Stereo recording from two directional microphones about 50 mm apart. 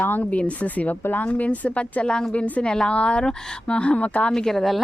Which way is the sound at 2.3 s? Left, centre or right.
Left.